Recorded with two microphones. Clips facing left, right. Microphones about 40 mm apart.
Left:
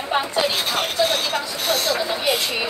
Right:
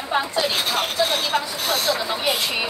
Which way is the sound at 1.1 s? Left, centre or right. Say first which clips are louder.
Even; centre.